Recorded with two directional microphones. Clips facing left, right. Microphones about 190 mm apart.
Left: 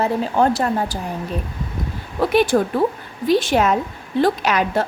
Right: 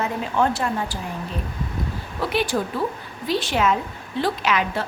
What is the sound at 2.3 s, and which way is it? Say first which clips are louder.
A woman's voice: left 7 dB; 50° left (ahead or behind).